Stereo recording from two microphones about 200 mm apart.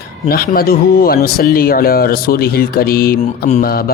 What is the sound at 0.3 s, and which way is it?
Speech, 50° left (ahead or behind).